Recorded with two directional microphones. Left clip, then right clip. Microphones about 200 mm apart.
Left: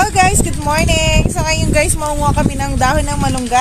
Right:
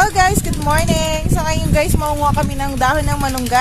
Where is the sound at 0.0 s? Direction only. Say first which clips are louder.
Left 1 dB; 20° left (ahead or behind).